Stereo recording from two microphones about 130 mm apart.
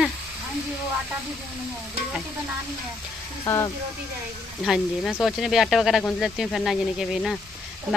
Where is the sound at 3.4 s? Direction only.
25° left (ahead or behind).